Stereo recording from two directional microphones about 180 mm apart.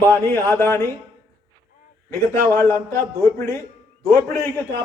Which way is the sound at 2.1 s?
15° left (ahead or behind).